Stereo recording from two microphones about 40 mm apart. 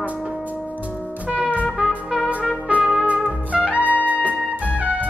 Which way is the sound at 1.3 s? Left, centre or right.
Right.